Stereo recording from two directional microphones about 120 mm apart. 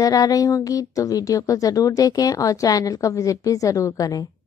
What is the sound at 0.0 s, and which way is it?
Speech, 30° left (ahead or behind).